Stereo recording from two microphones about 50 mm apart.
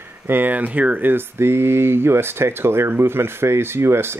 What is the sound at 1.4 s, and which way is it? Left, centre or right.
Speech, right.